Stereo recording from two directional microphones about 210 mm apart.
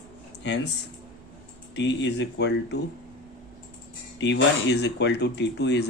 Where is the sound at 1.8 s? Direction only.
55° left (ahead or behind).